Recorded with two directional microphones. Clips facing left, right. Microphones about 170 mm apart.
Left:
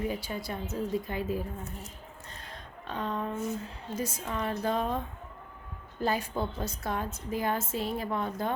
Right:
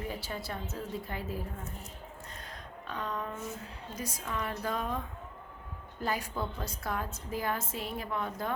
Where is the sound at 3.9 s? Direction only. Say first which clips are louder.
Left 4 dB; 25° left (ahead or behind).